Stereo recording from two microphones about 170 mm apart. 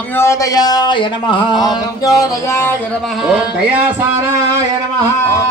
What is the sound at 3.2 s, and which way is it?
Music, 5° right (ahead or behind).